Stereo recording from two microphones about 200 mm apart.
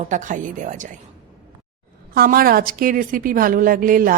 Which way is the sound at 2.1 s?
45° right (ahead or behind).